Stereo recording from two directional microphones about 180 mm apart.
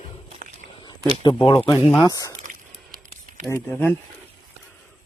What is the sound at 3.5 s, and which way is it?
Speech, 10° left (ahead or behind).